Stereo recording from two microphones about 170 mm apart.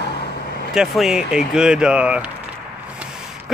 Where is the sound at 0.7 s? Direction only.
5° right (ahead or behind).